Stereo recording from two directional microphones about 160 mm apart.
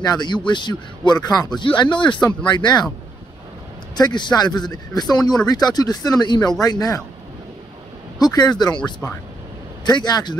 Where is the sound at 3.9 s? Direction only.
25° left (ahead or behind).